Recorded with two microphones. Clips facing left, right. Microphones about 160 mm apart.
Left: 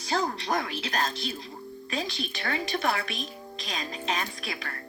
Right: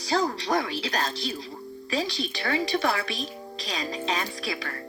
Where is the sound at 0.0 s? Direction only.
35° right (ahead or behind).